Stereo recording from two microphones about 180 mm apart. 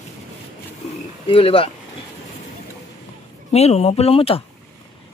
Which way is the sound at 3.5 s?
35° left (ahead or behind).